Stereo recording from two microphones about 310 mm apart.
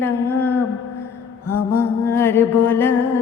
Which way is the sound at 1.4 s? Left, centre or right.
Left.